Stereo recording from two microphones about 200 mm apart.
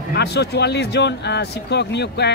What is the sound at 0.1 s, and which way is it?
A man's voice, 55° left (ahead or behind).